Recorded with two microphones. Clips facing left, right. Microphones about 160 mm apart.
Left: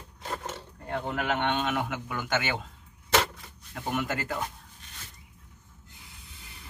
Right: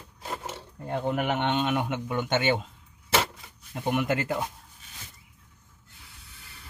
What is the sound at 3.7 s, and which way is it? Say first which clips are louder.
Speech: right 4 dB; 20° right (ahead or behind).